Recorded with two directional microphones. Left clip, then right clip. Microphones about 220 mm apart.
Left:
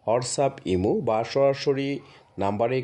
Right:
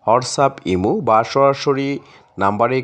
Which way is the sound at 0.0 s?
15° right (ahead or behind).